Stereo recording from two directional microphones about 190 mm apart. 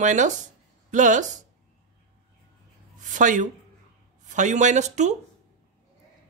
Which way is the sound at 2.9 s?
40° right (ahead or behind).